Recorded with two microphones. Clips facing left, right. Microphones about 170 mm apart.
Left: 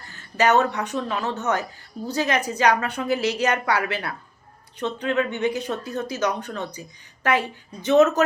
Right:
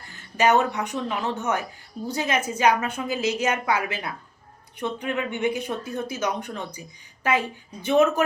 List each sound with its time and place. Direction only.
0.0 s speech: 15° right (ahead or behind)
3.1 s a woman's voice: 65° left (ahead or behind)
3.4 s speech: 10° right (ahead or behind)